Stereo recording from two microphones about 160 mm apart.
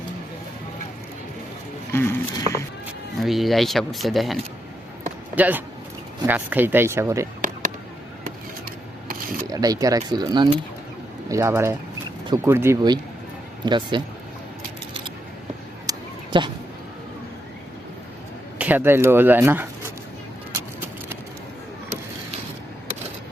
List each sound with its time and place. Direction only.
1.9 s speech: 15° left (ahead or behind)
3.2 s speech: centre (ahead or behind); by 7.3 s 15° right (ahead or behind)
9.0 s mechanisms: 65° right (ahead or behind)
9.5 s speech: 20° right (ahead or behind)
15.9 s a sound: 30° right (ahead or behind)
18.6 s speech: 10° right (ahead or behind)
20.5 s a sound: 15° right (ahead or behind)